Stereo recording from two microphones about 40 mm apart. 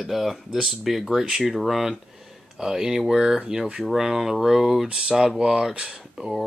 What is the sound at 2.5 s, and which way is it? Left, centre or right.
Speech, centre.